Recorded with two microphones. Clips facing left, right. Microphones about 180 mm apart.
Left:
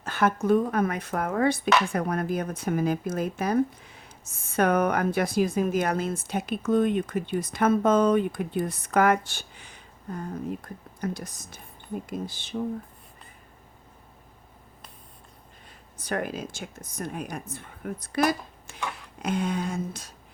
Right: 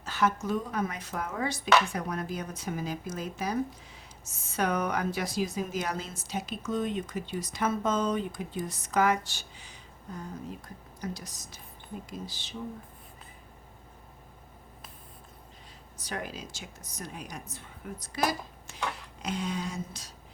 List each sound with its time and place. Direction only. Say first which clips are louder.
0.0 s speech: left 4 dB; 55° left (ahead or behind)
16.0 s speech: left 7 dB; 55° left (ahead or behind)